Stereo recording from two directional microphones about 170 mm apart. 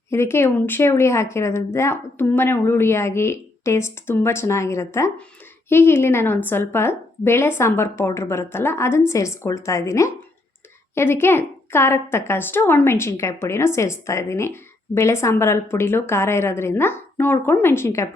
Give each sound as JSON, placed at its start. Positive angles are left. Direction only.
{"t": 0.1, "sound": "a woman's voice", "side_deg": 15}